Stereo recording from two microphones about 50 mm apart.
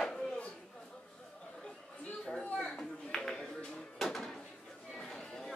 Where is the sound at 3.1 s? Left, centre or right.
Centre.